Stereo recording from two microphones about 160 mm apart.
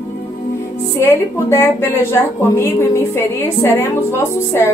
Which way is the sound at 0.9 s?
15° left (ahead or behind).